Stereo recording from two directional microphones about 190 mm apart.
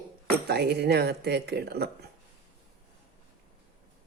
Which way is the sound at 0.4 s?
60° right (ahead or behind).